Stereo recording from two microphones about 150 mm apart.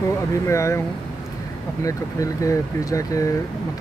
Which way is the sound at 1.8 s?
20° left (ahead or behind).